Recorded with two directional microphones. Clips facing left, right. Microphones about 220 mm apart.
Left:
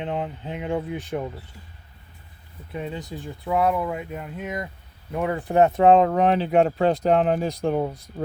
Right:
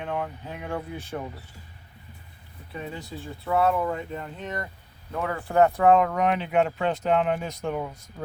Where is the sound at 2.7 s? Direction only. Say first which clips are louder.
Left 4 dB; 20° left (ahead or behind).